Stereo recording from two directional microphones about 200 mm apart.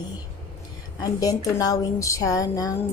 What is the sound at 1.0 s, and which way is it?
A woman's voice, 20° left (ahead or behind).